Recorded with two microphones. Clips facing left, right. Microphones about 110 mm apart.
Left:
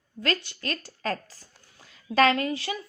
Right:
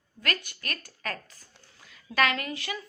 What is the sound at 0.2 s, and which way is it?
A woman's voice, 25° left (ahead or behind).